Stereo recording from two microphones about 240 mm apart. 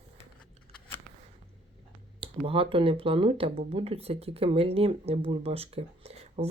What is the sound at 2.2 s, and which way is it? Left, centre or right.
Speech, right.